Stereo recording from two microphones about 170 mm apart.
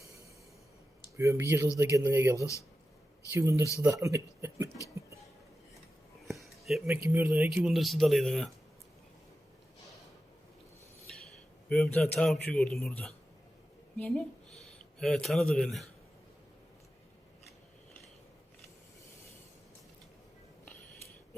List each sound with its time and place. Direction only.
1.1 s speech: 15° right (ahead or behind)
6.2 s a sound: centre (ahead or behind)
6.8 s speech: 10° right (ahead or behind)
11.7 s a man's voice: 10° left (ahead or behind)